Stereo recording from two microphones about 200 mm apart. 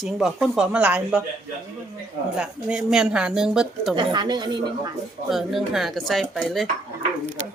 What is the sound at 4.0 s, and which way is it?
Speech, 20° right (ahead or behind).